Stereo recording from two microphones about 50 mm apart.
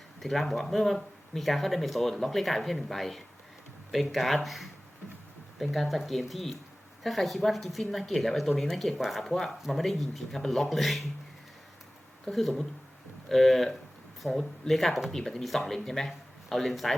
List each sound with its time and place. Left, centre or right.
0.2 s speech: centre
12.3 s speech: centre